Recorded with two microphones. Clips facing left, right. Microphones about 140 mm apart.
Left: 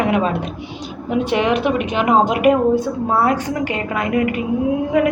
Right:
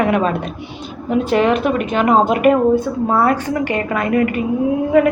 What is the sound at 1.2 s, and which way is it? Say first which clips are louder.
Speech: right 3 dB; 35° right (ahead or behind).